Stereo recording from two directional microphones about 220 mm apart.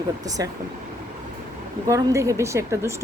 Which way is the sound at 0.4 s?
15° right (ahead or behind).